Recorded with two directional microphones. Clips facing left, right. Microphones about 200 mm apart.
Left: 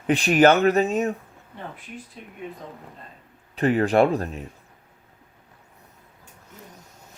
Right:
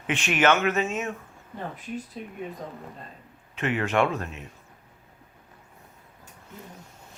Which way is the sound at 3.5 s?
35° left (ahead or behind).